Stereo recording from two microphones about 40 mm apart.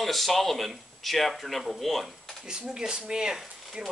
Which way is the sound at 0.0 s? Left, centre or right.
Centre.